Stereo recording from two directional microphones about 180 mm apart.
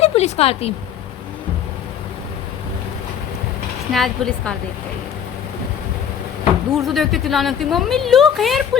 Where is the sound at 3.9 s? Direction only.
Centre (ahead or behind).